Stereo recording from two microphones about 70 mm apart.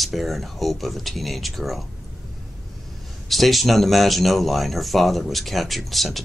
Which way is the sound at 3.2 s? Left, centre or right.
Centre.